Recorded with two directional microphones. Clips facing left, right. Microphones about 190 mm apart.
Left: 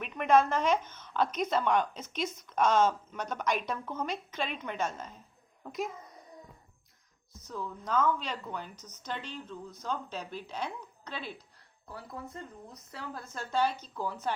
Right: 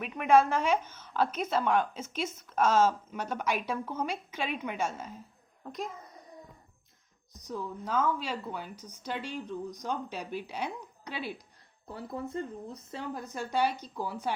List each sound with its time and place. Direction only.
0.0 s a woman's voice: 10° right (ahead or behind)
7.4 s a woman's voice: 10° right (ahead or behind)
11.9 s a woman's voice: 25° right (ahead or behind)